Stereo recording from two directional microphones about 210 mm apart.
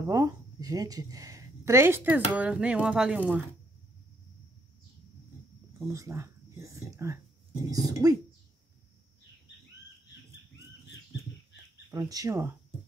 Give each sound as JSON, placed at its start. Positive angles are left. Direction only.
{"t": 0.1, "sound": "speech", "side_deg": -15}
{"t": 5.9, "sound": "speech", "side_deg": -15}
{"t": 11.9, "sound": "speech", "side_deg": -15}